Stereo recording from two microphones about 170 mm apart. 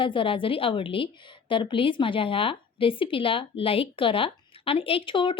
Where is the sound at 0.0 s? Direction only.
30° left (ahead or behind).